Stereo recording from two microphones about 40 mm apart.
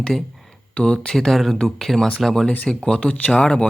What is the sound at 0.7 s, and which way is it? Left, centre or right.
Speech, left.